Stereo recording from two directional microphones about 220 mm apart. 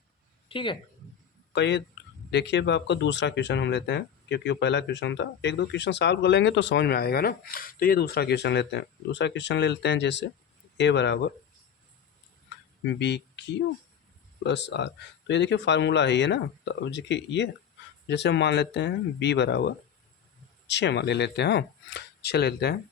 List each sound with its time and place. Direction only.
0.4 s a woman's voice: 20° left (ahead or behind)
1.5 s speech: 50° left (ahead or behind)
12.5 s a sound: 55° left (ahead or behind)
14.4 s speech: 50° left (ahead or behind)